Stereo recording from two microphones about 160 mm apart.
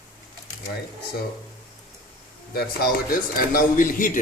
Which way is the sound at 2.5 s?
70° left (ahead or behind).